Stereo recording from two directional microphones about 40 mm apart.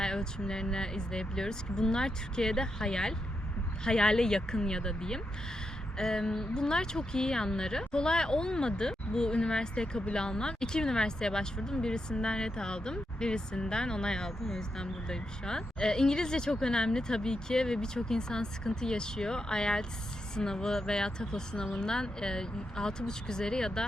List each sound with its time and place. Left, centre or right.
0.0 s speech: centre